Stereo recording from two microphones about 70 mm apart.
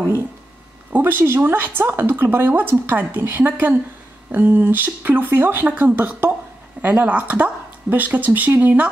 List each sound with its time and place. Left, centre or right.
0.9 s speech: right